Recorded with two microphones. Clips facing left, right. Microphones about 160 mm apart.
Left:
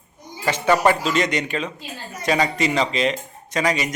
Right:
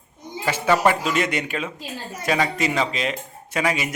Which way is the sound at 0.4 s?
5° right (ahead or behind).